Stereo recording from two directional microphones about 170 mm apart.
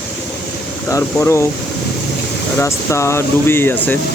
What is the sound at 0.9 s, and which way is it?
Speech, 20° left (ahead or behind).